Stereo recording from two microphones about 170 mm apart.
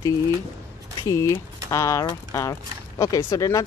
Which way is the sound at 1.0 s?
15° left (ahead or behind).